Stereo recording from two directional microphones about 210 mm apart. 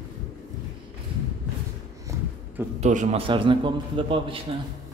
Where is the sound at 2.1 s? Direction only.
15° right (ahead or behind).